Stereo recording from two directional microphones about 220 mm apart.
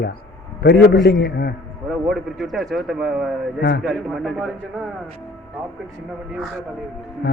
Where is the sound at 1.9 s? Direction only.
Centre (ahead or behind).